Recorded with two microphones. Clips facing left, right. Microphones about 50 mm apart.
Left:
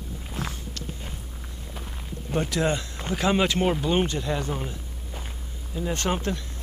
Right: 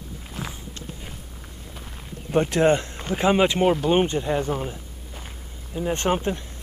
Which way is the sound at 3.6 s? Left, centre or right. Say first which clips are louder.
Right 4 dB; centre.